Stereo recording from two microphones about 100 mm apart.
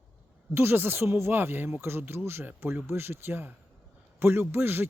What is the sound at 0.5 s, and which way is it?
Speech, 25° right (ahead or behind).